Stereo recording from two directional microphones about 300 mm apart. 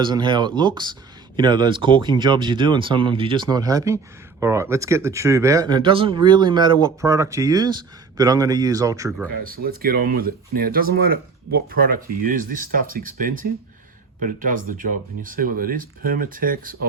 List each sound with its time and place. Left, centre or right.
0.0 s speech: centre
9.6 s speech: right